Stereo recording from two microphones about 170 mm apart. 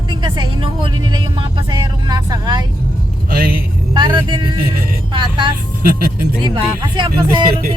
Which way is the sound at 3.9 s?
25° right (ahead or behind).